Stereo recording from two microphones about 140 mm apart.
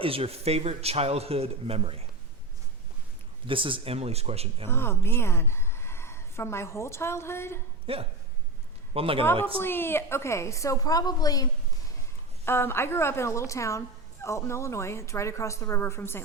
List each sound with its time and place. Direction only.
0.0 s a man's voice: 45° right (ahead or behind)
3.4 s a man's voice: 40° right (ahead or behind)
4.7 s a woman's voice: 15° left (ahead or behind)
7.9 s a man's voice: 40° right (ahead or behind)
9.6 s a woman's voice: 15° left (ahead or behind)
12.5 s a woman's voice: 15° left (ahead or behind)